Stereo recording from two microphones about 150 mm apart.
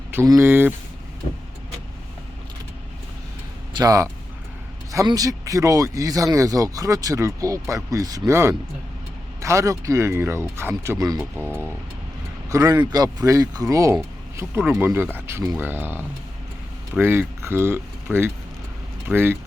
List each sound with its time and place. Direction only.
0.3 s speech: 15° right (ahead or behind)
3.7 s speech: 25° right (ahead or behind)
11.2 s speech: 15° right (ahead or behind)